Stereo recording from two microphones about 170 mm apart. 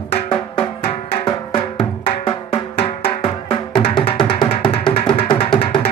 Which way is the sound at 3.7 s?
30° left (ahead or behind).